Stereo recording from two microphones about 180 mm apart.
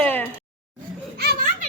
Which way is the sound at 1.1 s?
60° right (ahead or behind).